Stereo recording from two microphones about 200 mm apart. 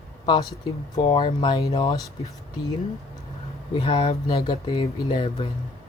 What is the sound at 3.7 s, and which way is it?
Speech, 25° left (ahead or behind).